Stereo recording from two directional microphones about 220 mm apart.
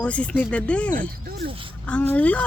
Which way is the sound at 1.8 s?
5° left (ahead or behind).